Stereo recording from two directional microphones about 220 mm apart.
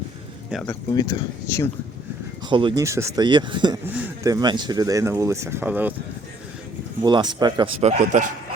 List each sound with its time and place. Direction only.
0.5 s speech: 10° left (ahead or behind)
2.5 s speech: 20° right (ahead or behind)
3.8 s speech: 10° right (ahead or behind)
7.0 s speech: 20° right (ahead or behind)
7.8 s a man's voice: 30° right (ahead or behind)